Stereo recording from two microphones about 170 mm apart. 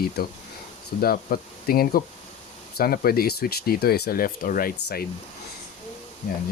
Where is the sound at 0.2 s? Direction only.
60° left (ahead or behind).